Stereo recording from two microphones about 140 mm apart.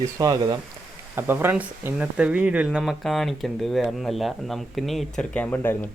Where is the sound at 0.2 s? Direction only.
30° right (ahead or behind).